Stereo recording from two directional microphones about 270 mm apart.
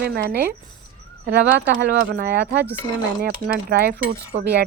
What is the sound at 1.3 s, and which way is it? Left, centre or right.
Speech, right.